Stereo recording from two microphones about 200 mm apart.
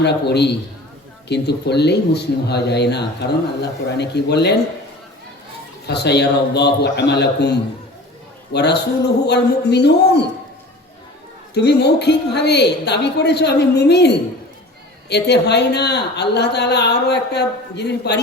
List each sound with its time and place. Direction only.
0.0 s a man's voice: 55° left (ahead or behind)
5.9 s a man's voice: 55° left (ahead or behind)
8.5 s a man's voice: 55° left (ahead or behind)
11.5 s a man's voice: 55° left (ahead or behind)